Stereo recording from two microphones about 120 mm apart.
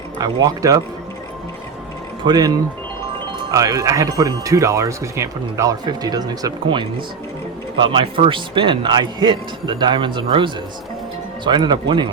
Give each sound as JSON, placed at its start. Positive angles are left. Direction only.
{"t": 0.2, "sound": "speech", "side_deg": -30}
{"t": 2.2, "sound": "speech", "side_deg": -35}
{"t": 3.5, "sound": "a man's voice", "side_deg": -30}